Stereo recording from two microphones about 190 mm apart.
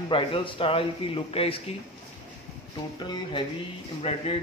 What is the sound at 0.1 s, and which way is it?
Speech, 25° left (ahead or behind).